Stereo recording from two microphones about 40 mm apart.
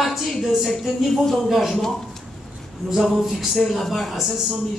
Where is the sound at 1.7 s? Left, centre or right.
Centre.